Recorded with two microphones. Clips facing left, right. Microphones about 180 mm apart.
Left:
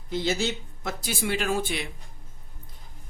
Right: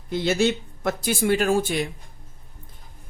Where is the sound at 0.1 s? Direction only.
60° right (ahead or behind).